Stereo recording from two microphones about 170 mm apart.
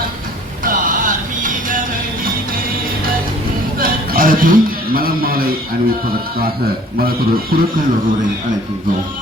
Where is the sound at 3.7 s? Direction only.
60° right (ahead or behind).